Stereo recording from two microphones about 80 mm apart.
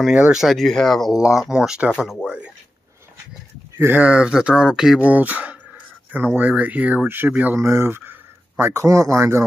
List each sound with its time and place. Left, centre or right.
0.1 s speech: centre
3.7 s speech: right
4.0 s speech: centre
5.0 s speech: centre
7.5 s speech: right
8.8 s speech: right